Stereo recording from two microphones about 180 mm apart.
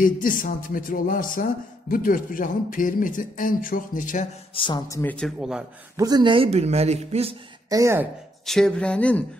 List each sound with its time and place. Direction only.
0.0 s speech: 50° left (ahead or behind)
4.6 s speech: 25° left (ahead or behind)
5.1 s speech: centre (ahead or behind)
5.9 s speech: 20° right (ahead or behind)
7.7 s speech: 15° right (ahead or behind)
8.5 s speech: 5° left (ahead or behind)